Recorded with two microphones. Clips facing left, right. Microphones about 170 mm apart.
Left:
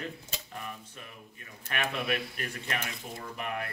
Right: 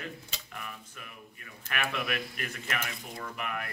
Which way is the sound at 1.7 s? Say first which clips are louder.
Left 1 dB; 30° left (ahead or behind).